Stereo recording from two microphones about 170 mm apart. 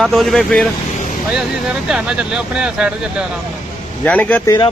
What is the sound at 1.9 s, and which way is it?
Speech, 5° right (ahead or behind).